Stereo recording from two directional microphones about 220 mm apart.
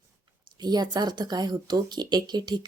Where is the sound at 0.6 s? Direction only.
20° right (ahead or behind).